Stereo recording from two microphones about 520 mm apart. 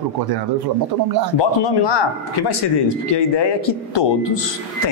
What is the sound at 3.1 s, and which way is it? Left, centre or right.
Speech, left.